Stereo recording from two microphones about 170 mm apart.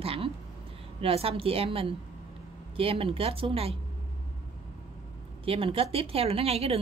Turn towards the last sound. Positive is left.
turn(degrees=-35)  # may be behind; listen again after turning